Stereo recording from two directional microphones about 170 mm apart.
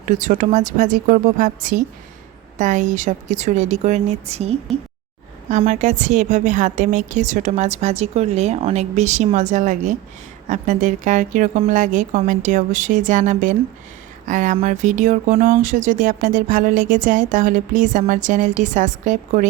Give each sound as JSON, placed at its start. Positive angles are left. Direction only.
{"t": 0.0, "sound": "speech", "side_deg": -50}